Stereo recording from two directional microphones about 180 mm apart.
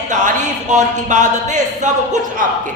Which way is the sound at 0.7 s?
40° right (ahead or behind).